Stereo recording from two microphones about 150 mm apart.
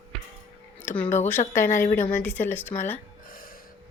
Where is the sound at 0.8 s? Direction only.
15° left (ahead or behind).